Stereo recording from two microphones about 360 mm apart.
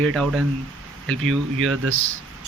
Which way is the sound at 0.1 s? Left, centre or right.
Centre.